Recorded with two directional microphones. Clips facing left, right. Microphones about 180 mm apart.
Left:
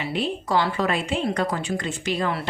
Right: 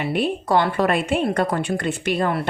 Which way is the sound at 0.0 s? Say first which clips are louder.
Right 4 dB; 55° right (ahead or behind).